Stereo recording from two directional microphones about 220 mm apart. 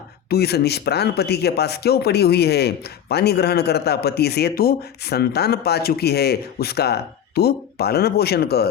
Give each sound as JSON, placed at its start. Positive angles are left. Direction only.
{"t": 0.3, "sound": "speech", "side_deg": 45}